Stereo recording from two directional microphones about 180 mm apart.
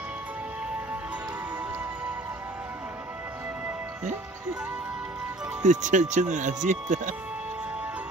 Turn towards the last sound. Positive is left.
turn(degrees=-45)  # may be behind; listen again after turning